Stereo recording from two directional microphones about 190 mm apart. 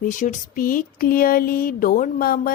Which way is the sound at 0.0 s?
40° left (ahead or behind).